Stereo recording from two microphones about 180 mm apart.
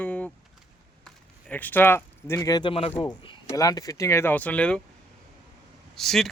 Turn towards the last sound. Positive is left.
turn(degrees=0)  # may be behind; listen again after turning